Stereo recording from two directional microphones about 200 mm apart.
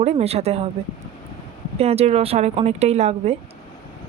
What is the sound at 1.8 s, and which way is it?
Speech, 30° right (ahead or behind).